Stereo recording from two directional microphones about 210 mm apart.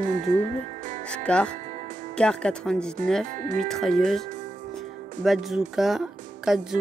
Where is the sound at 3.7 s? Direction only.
Centre (ahead or behind).